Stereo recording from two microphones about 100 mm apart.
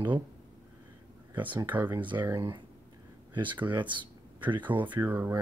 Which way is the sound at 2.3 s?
45° right (ahead or behind).